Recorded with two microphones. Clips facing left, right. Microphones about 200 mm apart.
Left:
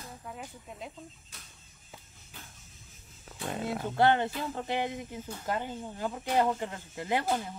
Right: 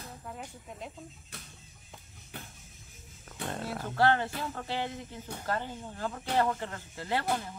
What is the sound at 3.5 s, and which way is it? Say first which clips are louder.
Speech: left 4 dB; 15° left (ahead or behind).